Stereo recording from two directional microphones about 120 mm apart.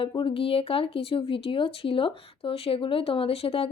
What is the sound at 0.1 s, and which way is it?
Speech, 45° left (ahead or behind).